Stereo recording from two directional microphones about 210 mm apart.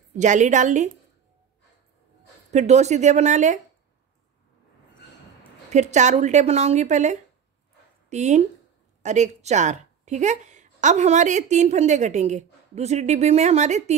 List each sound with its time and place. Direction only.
0.2 s a woman's voice: 35° right (ahead or behind)
2.5 s a woman's voice: 30° right (ahead or behind)
5.7 s a woman's voice: 35° right (ahead or behind)